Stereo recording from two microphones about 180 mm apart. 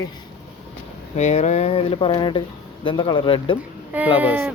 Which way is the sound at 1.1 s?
40° left (ahead or behind).